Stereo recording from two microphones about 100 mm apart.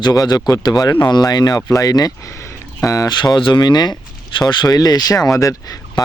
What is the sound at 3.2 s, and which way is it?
Speech, 50° left (ahead or behind).